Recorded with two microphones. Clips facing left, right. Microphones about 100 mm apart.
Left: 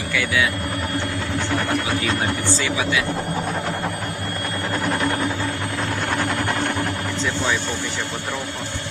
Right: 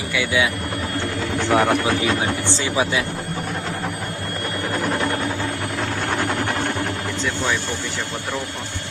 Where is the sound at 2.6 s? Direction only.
30° right (ahead or behind).